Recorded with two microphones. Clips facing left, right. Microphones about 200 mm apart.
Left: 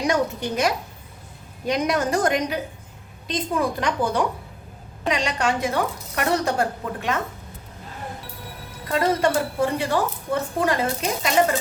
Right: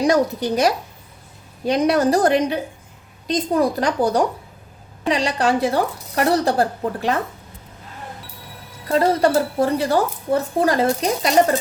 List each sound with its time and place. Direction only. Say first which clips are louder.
0.0 s a woman's voice: right 5 dB; 35° right (ahead or behind)
8.9 s a woman's voice: right 4 dB; 35° right (ahead or behind)